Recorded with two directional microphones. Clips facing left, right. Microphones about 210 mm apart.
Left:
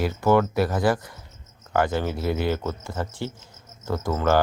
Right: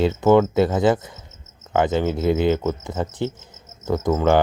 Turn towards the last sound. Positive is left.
turn(degrees=-20)  # may be behind; listen again after turning